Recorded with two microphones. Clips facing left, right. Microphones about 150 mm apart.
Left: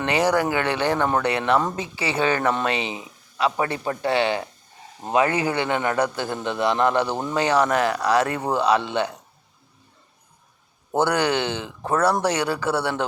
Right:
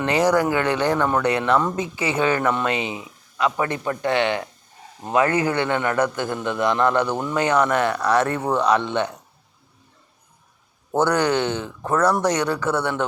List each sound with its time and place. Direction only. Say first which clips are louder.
0.0 s a man's voice: right 2 dB; 25° left (ahead or behind)
10.9 s a man's voice: right 2 dB; 30° left (ahead or behind)